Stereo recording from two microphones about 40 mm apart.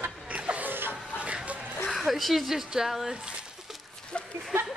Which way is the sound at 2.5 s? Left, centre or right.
Centre.